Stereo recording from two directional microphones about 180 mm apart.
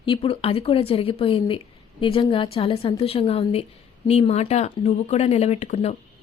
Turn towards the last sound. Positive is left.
turn(degrees=35)  # may be behind; listen again after turning